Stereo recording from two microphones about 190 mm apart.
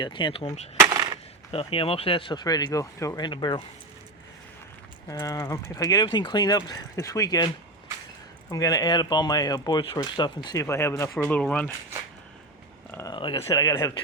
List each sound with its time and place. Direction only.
0.0 s speech: 25° left (ahead or behind)
0.8 s a sound: 20° right (ahead or behind)
1.5 s speech: 30° left (ahead or behind)
5.0 s speech: 20° left (ahead or behind)
12.9 s a sound: 15° left (ahead or behind)
13.1 s speech: 20° left (ahead or behind)